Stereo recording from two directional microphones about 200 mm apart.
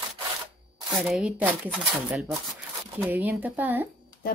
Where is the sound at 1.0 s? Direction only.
Centre (ahead or behind).